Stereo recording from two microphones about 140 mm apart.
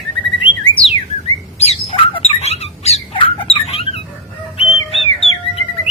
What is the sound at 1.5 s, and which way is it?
Bird, 50° left (ahead or behind).